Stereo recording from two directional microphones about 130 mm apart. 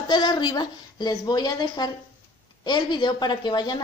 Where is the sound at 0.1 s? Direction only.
35° left (ahead or behind).